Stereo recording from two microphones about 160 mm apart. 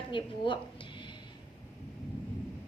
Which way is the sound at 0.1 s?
30° left (ahead or behind).